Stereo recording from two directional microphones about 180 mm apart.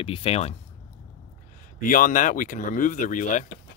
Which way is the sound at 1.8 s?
50° left (ahead or behind).